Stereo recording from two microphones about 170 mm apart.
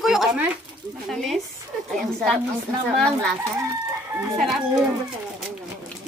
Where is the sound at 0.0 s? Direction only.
Centre (ahead or behind).